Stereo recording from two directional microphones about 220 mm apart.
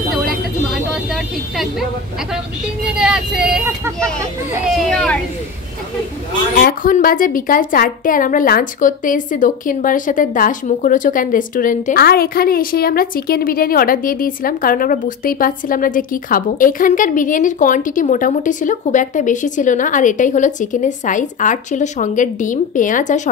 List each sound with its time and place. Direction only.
0.1 s a sound: centre (ahead or behind)
2.9 s speech: 5° right (ahead or behind)
4.6 s speech: 5° left (ahead or behind)
6.5 s a woman's voice: 40° left (ahead or behind)